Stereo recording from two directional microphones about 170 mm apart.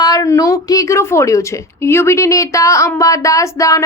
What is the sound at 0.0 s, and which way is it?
A woman's voice, 20° left (ahead or behind).